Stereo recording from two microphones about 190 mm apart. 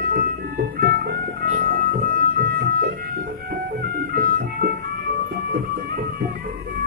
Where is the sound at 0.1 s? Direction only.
50° right (ahead or behind).